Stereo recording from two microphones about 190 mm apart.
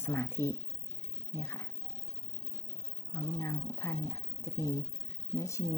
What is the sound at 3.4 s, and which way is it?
Speech, 15° left (ahead or behind).